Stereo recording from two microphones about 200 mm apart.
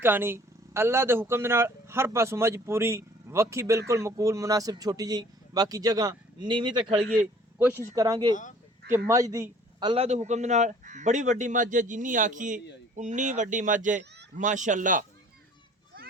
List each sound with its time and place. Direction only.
0.0 s a man's voice: 10° right (ahead or behind)
9.9 s a man's voice: 30° right (ahead or behind)